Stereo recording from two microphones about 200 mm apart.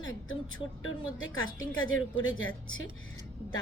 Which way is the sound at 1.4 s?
90° left.